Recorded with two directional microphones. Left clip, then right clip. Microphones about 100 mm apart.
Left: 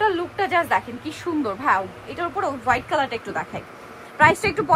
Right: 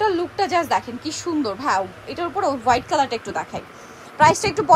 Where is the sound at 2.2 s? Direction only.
55° right (ahead or behind).